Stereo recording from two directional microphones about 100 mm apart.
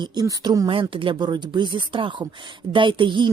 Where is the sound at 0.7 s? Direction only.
60° right (ahead or behind).